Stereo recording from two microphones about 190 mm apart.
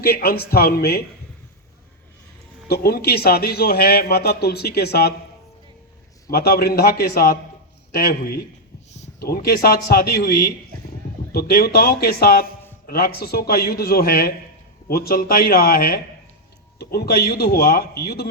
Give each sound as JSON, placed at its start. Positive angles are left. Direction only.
{"t": 0.0, "sound": "speech", "side_deg": 55}
{"t": 2.6, "sound": "speech", "side_deg": 55}
{"t": 6.3, "sound": "a man's voice", "side_deg": 55}